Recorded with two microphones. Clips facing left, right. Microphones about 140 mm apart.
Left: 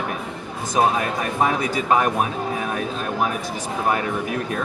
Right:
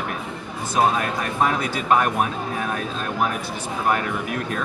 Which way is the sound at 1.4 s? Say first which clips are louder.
Left 1 dB; 15° left (ahead or behind).